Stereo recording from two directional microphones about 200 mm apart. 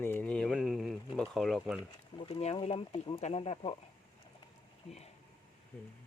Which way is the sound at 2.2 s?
30° left (ahead or behind).